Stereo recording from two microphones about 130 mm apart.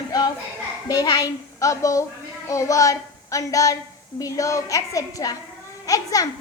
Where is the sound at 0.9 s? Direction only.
30° left (ahead or behind).